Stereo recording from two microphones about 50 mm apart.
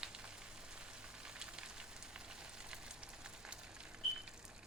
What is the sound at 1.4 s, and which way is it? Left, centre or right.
Fire, centre.